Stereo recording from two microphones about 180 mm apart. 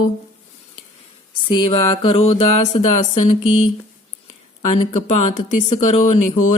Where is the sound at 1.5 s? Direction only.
30° left (ahead or behind).